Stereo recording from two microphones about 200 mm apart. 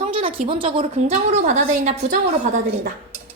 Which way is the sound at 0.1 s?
25° right (ahead or behind).